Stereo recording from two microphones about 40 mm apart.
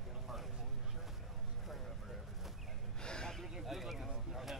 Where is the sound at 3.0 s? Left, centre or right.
Centre.